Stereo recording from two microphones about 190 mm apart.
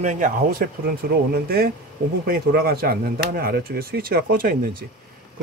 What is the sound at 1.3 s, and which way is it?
Speech, 55° right (ahead or behind).